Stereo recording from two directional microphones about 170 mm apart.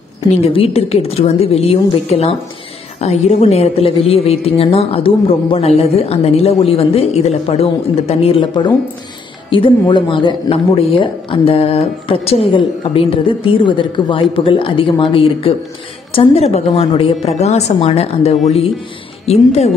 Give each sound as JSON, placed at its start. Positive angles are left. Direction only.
{"t": 0.3, "sound": "speech", "side_deg": 35}